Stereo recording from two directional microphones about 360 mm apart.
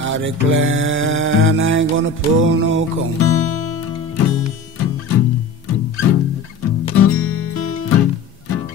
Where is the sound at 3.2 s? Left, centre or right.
Left.